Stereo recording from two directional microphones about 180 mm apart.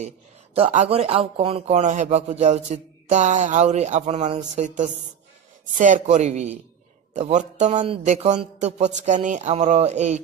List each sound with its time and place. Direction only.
0.6 s a man's voice: 40° right (ahead or behind)